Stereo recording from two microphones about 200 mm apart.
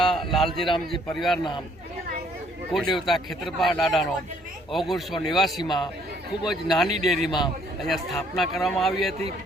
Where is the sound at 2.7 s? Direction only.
Centre (ahead or behind).